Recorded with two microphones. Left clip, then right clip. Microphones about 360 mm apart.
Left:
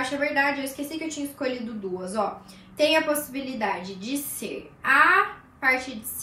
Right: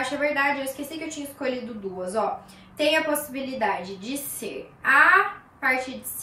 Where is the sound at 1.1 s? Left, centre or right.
Centre.